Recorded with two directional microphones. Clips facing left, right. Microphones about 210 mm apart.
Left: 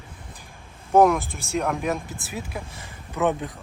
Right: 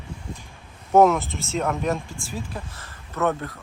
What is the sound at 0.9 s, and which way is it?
Speech, centre (ahead or behind).